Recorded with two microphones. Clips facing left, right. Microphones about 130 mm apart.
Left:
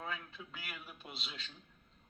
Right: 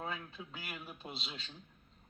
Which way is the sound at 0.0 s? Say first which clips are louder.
Right 2 dB; 30° right (ahead or behind).